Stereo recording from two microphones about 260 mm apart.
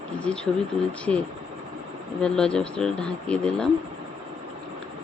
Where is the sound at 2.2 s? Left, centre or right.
Centre.